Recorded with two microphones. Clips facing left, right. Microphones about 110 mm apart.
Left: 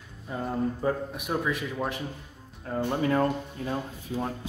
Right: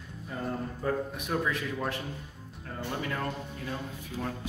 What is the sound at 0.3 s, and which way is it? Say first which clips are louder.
Speech: left 5 dB; 20° left (ahead or behind).